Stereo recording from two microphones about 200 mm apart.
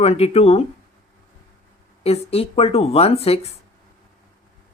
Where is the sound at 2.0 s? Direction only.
30° left (ahead or behind).